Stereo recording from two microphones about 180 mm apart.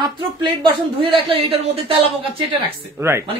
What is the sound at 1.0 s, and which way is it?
Speech, 30° right (ahead or behind).